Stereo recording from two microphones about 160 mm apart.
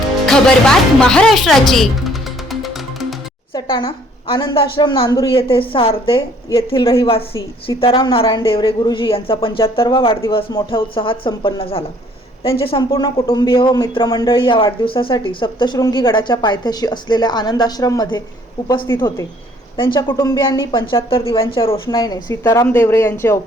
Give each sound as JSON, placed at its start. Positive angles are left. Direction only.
{"t": 0.3, "sound": "music", "side_deg": 5}
{"t": 3.5, "sound": "a woman's voice", "side_deg": 30}
{"t": 5.3, "sound": "a woman's voice", "side_deg": 35}